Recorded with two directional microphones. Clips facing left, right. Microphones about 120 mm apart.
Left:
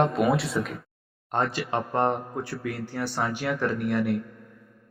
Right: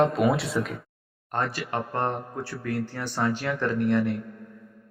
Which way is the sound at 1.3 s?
20° left (ahead or behind).